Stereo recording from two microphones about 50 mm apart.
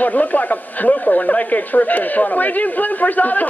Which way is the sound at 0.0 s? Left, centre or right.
Left.